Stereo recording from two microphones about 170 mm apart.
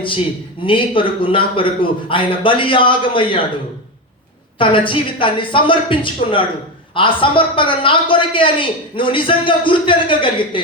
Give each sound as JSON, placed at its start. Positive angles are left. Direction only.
{"t": 0.6, "sound": "a man's voice", "side_deg": 30}
{"t": 4.5, "sound": "a woman's voice", "side_deg": 30}